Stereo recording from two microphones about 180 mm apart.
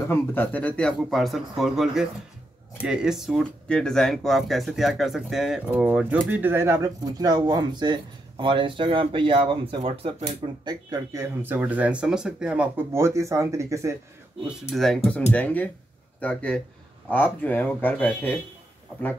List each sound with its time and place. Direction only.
0.1 s speech: 10° left (ahead or behind); by 13.9 s 15° right (ahead or behind)
14.7 s speech: centre (ahead or behind)